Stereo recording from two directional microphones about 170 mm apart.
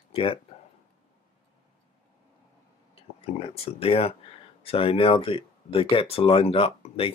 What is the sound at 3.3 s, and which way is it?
Speech, 35° left (ahead or behind).